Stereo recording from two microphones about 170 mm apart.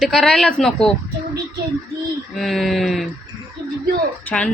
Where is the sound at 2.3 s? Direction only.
Centre (ahead or behind).